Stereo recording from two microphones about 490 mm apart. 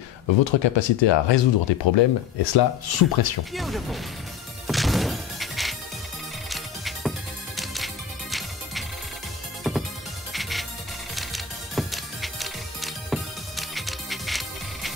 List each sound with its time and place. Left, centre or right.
0.4 s speech: left
3.5 s speech: centre
4.6 s music: centre